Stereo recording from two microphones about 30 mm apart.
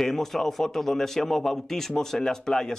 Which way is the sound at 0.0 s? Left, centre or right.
Centre.